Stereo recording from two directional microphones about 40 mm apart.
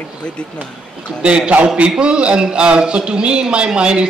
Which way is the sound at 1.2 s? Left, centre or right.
Right.